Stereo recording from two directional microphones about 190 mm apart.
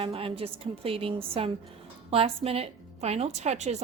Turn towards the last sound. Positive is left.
turn(degrees=-35)  # may be behind; listen again after turning